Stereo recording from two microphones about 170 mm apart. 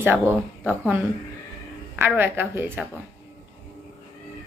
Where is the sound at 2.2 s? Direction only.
10° right (ahead or behind).